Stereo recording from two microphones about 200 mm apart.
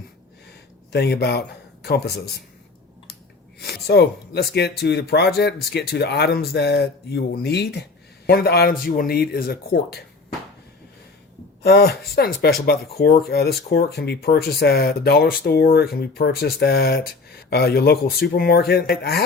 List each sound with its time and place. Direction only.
0.9 s speech: 55° left (ahead or behind)
3.6 s speech: 55° left (ahead or behind)
11.6 s speech: 50° left (ahead or behind)